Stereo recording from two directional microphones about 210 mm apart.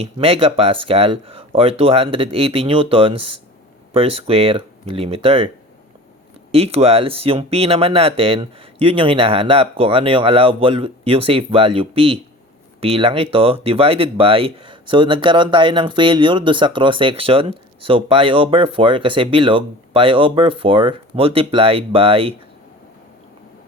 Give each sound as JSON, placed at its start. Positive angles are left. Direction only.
{"t": 0.0, "sound": "speech", "side_deg": -25}
{"t": 6.5, "sound": "speech", "side_deg": -30}